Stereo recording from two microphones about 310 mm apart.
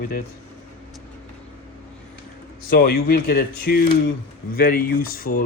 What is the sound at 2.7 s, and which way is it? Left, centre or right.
Speech, left.